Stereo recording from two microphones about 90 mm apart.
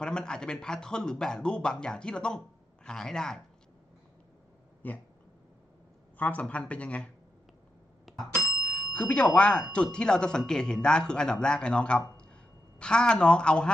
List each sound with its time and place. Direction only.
0.0 s speech: 10° left (ahead or behind)
4.8 s a sound: 20° left (ahead or behind)
6.1 s speech: 15° left (ahead or behind)
8.1 s bicycle bell: centre (ahead or behind)
9.0 s speech: 15° left (ahead or behind)